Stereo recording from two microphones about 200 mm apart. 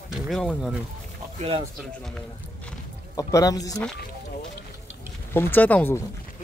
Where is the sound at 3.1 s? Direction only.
15° left (ahead or behind).